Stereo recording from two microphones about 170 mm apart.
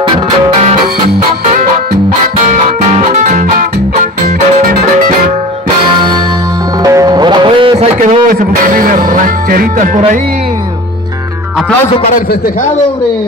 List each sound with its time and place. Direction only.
3.0 s music: 45° right (ahead or behind)
6.8 s music: 20° right (ahead or behind)
8.0 s music: 55° right (ahead or behind)